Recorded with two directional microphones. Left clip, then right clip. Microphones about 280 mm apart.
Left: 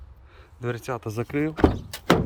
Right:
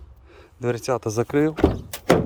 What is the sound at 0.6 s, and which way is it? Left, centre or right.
Speech, centre.